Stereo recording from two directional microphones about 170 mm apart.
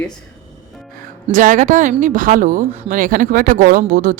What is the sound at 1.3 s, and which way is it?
Speech, 50° right (ahead or behind).